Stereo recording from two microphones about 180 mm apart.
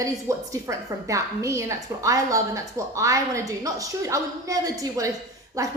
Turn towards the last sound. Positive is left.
turn(degrees=-20)  # may be behind; listen again after turning